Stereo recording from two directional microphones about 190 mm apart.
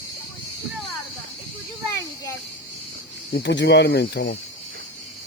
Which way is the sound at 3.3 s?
60° left (ahead or behind).